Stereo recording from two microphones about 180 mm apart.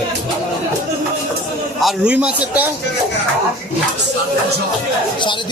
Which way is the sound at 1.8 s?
5° right (ahead or behind).